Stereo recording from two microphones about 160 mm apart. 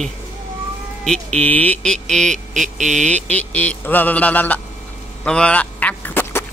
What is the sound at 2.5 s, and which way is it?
Speech, 50° right (ahead or behind).